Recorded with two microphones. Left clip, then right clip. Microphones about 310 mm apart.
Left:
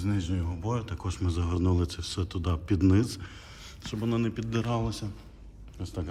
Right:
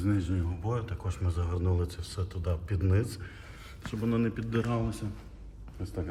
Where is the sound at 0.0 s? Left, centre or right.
Centre.